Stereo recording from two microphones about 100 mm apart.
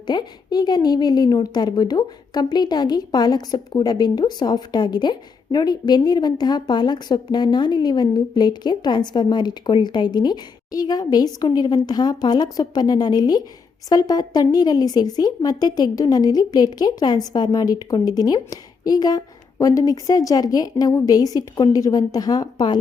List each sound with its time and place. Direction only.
0.1 s a woman's voice: 45° left (ahead or behind)